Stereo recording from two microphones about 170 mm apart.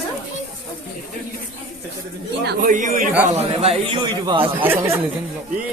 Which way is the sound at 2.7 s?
50° right (ahead or behind).